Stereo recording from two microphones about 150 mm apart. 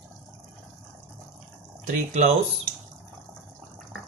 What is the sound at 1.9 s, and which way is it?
Speech, 50° right (ahead or behind).